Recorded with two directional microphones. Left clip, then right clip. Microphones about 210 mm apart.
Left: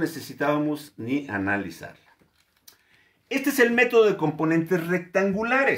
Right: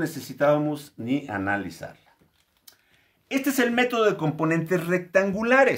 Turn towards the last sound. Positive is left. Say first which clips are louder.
# right 2 dB
turn(degrees=-50)  # may be behind; listen again after turning